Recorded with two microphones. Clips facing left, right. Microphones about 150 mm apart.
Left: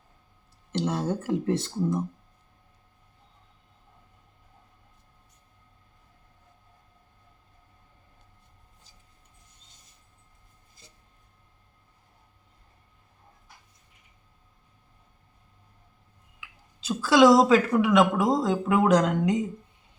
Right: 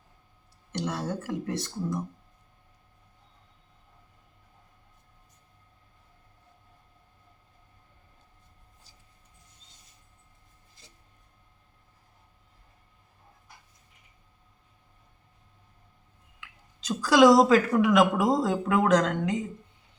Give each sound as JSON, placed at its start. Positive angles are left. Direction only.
{"t": 0.7, "sound": "speech", "side_deg": 25}
{"t": 16.4, "sound": "a woman's voice", "side_deg": 5}